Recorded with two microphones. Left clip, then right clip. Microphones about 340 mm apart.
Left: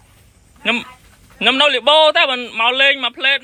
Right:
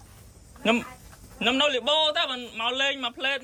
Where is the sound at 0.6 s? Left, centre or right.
Centre.